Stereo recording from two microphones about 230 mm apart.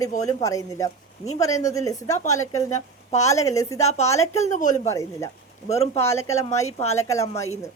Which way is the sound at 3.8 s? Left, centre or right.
Left.